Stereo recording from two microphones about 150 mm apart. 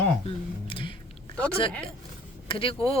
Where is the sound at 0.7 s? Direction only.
35° left (ahead or behind).